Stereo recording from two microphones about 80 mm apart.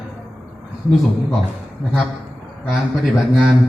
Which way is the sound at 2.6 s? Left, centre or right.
Centre.